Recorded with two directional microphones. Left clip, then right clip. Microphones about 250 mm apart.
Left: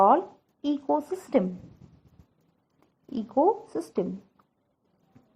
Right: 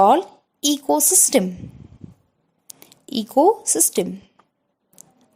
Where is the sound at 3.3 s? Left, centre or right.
Right.